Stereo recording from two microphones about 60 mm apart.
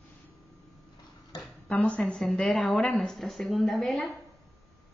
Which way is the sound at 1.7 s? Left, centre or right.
Left.